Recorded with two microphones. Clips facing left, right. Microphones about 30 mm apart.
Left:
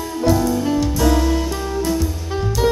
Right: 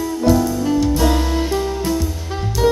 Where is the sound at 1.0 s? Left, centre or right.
Centre.